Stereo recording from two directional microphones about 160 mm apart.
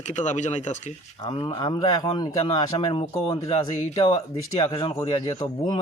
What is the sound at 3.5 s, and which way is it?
Speech, 40° left (ahead or behind).